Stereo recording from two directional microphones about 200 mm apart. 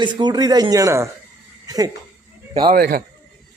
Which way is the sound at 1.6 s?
20° right (ahead or behind).